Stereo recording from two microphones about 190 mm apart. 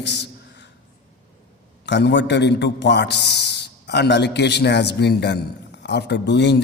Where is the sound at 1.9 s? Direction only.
65° left (ahead or behind).